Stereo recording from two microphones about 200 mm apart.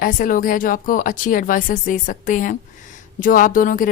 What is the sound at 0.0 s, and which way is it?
Speech, 45° left (ahead or behind).